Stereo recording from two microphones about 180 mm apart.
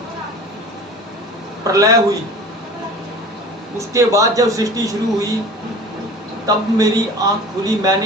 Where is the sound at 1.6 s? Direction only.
20° right (ahead or behind).